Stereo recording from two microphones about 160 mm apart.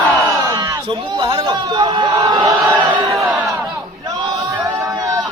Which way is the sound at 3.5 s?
20° right (ahead or behind).